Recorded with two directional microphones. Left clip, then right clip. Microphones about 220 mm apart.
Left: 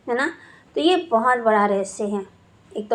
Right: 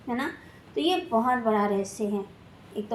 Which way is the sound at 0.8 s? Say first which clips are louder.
Left 7 dB; 20° left (ahead or behind).